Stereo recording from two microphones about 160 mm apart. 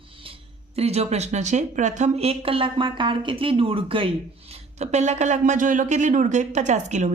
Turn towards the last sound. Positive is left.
turn(degrees=-50)  # may be behind; listen again after turning